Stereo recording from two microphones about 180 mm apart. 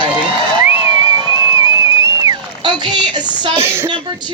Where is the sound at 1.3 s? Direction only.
20° right (ahead or behind).